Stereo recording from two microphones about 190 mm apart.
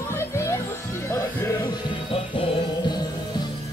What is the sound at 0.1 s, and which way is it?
Music, 15° left (ahead or behind).